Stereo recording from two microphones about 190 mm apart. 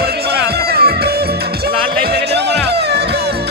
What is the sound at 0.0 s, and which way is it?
Music, 55° right (ahead or behind).